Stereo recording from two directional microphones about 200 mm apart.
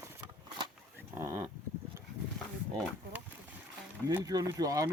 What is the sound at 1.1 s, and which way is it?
Speech, 15° right (ahead or behind).